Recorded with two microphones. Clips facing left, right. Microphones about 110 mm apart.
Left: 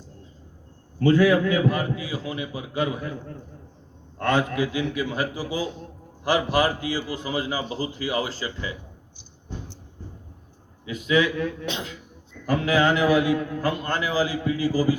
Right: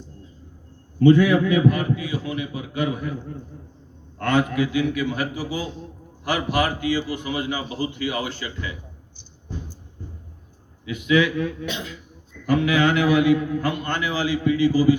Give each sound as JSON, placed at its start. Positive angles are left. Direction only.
{"t": 1.0, "sound": "a man's voice", "side_deg": 30}
{"t": 4.2, "sound": "a man's voice", "side_deg": 30}
{"t": 10.8, "sound": "a man's voice", "side_deg": 35}
{"t": 12.5, "sound": "a man's voice", "side_deg": 35}